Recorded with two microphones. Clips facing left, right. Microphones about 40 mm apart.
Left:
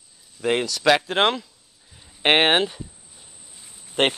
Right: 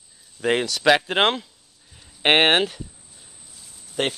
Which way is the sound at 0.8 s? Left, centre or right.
Centre.